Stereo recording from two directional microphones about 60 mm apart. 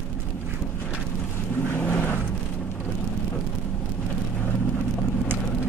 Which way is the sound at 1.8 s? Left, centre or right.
Left.